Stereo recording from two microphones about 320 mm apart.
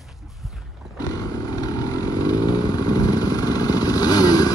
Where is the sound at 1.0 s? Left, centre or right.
Centre.